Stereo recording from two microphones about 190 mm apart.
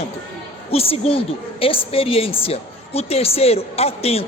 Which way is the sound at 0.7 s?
30° left (ahead or behind).